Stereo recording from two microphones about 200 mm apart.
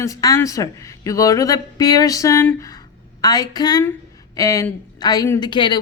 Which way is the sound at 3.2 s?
20° left (ahead or behind).